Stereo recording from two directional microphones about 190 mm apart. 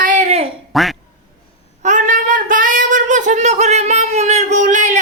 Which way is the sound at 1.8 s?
40° right (ahead or behind).